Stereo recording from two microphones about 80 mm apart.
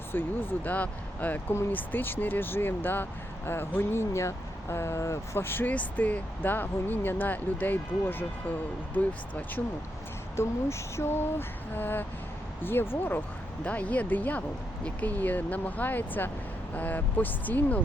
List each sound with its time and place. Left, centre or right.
0.1 s speech: left
10.3 s speech: left